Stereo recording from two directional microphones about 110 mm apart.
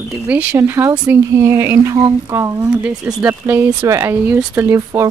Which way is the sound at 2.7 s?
10° right (ahead or behind).